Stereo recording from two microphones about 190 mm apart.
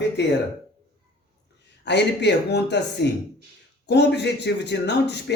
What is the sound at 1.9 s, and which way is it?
Speech, 65° left (ahead or behind).